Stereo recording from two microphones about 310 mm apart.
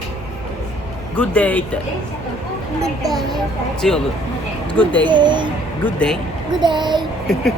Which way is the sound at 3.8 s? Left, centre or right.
Centre.